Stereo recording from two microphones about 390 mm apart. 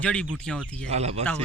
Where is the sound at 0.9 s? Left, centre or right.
Centre.